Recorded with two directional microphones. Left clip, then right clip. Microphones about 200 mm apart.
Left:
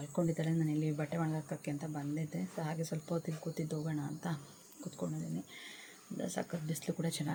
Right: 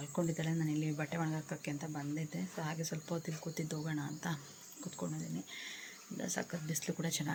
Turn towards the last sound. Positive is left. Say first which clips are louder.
# even
turn(degrees=0)  # may be behind; listen again after turning